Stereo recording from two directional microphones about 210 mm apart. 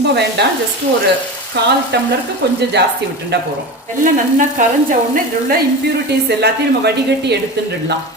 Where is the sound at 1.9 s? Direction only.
50° right (ahead or behind).